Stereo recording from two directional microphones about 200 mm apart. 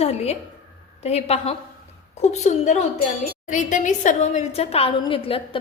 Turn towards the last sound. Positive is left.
turn(degrees=30)  # may be behind; listen again after turning